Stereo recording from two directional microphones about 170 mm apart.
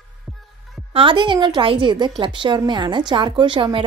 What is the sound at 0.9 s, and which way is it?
A woman's voice, 30° right (ahead or behind).